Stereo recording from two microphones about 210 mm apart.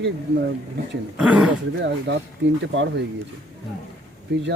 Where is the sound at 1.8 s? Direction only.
55° right (ahead or behind).